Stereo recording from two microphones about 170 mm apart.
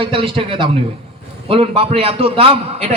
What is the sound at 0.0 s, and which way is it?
A man's voice, 30° right (ahead or behind).